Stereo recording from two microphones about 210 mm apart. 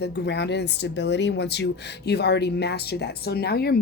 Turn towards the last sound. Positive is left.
turn(degrees=50)  # may be behind; listen again after turning